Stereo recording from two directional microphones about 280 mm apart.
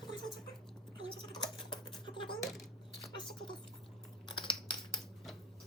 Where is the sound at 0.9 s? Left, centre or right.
Centre.